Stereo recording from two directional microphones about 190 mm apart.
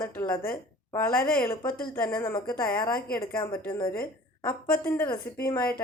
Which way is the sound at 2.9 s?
50° left (ahead or behind).